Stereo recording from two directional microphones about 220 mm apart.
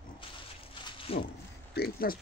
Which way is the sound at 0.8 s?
25° left (ahead or behind).